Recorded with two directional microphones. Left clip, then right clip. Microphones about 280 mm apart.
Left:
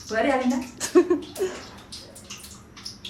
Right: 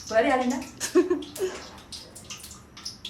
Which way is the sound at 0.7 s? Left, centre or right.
Centre.